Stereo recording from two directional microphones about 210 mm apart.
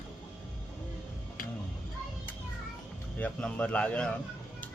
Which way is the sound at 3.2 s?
5° left (ahead or behind).